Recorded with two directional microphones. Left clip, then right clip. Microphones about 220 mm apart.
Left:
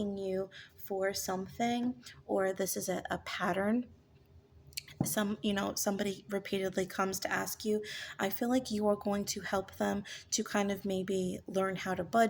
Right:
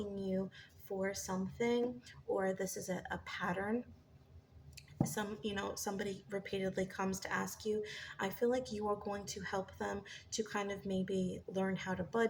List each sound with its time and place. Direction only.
0.2 s a sound: 50° left (ahead or behind)
0.9 s a woman's voice: 50° left (ahead or behind)
5.0 s a woman's voice: 50° left (ahead or behind)